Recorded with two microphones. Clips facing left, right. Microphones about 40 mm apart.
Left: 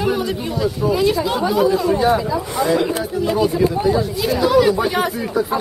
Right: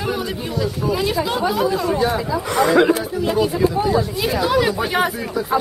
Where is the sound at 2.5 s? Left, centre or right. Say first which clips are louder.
Right 4 dB; right.